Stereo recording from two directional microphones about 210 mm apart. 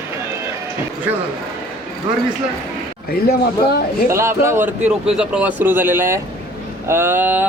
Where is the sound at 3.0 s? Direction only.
45° left (ahead or behind).